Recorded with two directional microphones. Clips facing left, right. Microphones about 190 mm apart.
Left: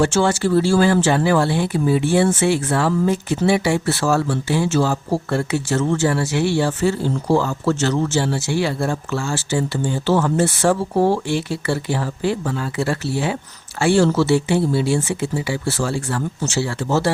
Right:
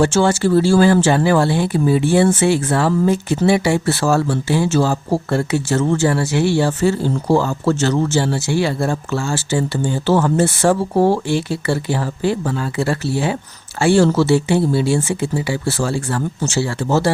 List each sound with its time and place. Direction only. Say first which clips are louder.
0.0 s speech: right 2 dB; 35° right (ahead or behind)